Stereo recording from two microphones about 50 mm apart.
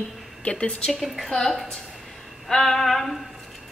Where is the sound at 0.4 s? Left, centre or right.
Left.